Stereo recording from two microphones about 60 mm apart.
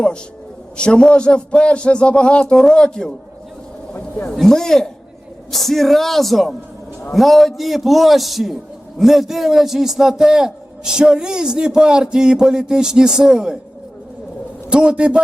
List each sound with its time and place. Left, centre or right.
0.8 s a man's voice: centre
4.4 s a man's voice: centre
14.7 s a man's voice: centre